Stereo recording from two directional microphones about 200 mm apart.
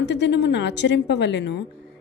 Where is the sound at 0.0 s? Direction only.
60° left (ahead or behind).